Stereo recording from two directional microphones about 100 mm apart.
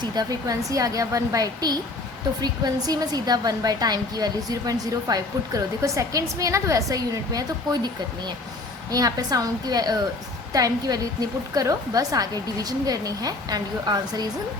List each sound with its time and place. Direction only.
0.0 s a woman's voice: 45° right (ahead or behind)
8.9 s a woman's voice: 40° right (ahead or behind)